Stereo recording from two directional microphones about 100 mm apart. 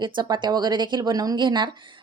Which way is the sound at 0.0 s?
50° right (ahead or behind).